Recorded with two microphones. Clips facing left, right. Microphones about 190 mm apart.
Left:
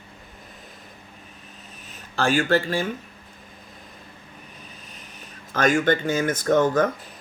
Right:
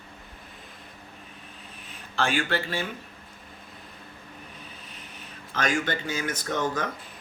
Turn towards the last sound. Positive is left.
turn(degrees=50)  # may be behind; listen again after turning